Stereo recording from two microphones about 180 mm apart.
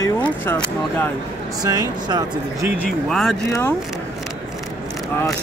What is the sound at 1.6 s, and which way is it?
Speech, 20° right (ahead or behind).